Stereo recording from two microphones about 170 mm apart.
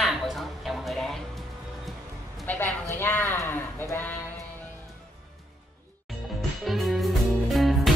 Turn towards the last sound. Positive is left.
turn(degrees=0)  # may be behind; listen again after turning